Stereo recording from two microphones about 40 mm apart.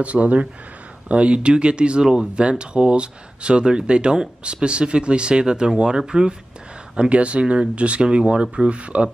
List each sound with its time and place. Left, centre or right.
0.0 s speech: right; by 6.3 s centre
7.0 s speech: right
8.2 s speech: centre